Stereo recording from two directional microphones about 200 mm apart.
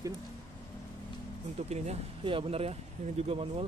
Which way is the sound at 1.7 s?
30° right (ahead or behind).